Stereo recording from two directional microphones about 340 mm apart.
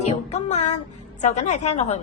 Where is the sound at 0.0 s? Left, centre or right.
Centre.